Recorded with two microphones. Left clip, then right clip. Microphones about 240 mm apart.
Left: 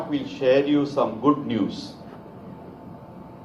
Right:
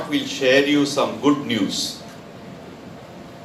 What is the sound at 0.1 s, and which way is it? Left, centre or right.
Speech, right.